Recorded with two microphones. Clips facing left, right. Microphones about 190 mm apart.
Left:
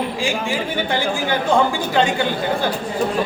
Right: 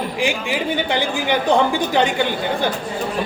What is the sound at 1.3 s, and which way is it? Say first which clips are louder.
Speech: right 1 dB; 15° right (ahead or behind).